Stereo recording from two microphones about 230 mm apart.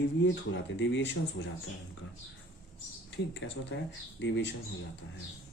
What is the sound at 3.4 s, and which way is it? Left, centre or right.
Speech, left.